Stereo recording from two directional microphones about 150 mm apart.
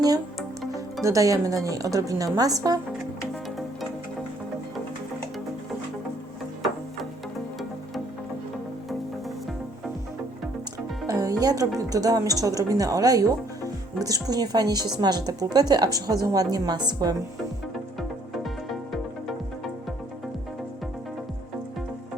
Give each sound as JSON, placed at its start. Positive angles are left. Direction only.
{"t": 1.0, "sound": "speech", "side_deg": -20}
{"t": 11.0, "sound": "speech", "side_deg": -25}